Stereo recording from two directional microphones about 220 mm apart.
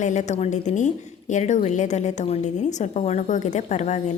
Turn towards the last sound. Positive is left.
turn(degrees=30)  # may be behind; listen again after turning